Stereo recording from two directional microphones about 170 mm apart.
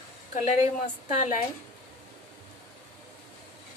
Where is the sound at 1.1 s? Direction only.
45° left (ahead or behind).